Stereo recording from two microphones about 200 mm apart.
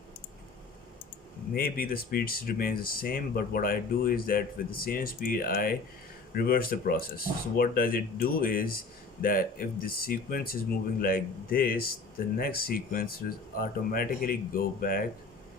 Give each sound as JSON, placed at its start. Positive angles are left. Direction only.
{"t": 1.5, "sound": "speech", "side_deg": 45}